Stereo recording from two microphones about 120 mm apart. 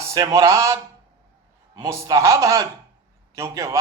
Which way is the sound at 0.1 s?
30° right (ahead or behind).